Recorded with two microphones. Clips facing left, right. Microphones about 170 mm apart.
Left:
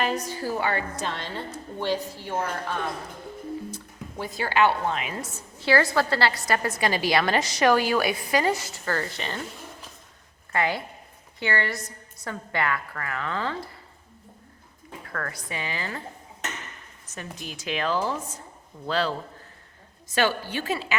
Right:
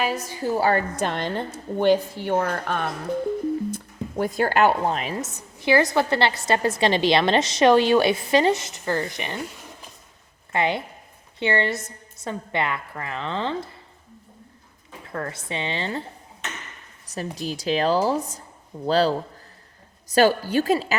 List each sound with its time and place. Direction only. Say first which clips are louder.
0.0 s a woman's voice: right 1 dB; 5° right (ahead or behind)
0.3 s a woman's voice: right 5 dB; 25° right (ahead or behind)
0.6 s a woman's voice: right 6 dB; 45° right (ahead or behind); by 2.8 s 65° right (ahead or behind)
4.2 s a woman's voice: right 4 dB; 50° right (ahead or behind)
5.1 s a woman's voice: right 4 dB; 20° right (ahead or behind)
10.5 s a woman's voice: right 3 dB; 20° right (ahead or behind)
15.1 s a woman's voice: right 4 dB; 25° right (ahead or behind)
17.1 s a woman's voice: right 9 dB; 35° right (ahead or behind)